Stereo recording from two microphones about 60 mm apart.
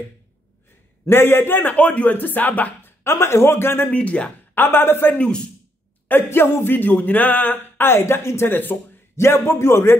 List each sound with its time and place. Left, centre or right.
1.0 s speech: left
1.8 s speech: left
3.0 s a man's voice: left
3.9 s speech: left
4.6 s speech: left
8.5 s speech: left
9.1 s a man's voice: left